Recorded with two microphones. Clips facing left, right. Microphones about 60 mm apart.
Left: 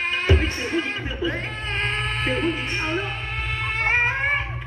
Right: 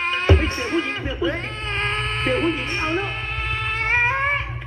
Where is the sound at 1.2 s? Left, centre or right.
Right.